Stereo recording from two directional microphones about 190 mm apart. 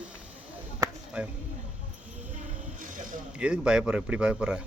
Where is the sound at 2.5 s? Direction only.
45° right (ahead or behind).